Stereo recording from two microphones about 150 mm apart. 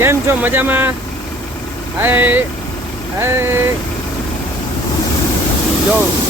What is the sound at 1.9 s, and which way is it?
Speech, 15° right (ahead or behind).